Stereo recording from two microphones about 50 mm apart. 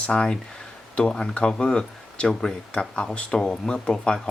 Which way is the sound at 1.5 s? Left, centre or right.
Centre.